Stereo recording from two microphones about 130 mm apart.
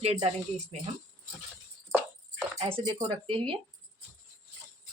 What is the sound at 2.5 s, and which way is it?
A woman's voice, 45° right (ahead or behind).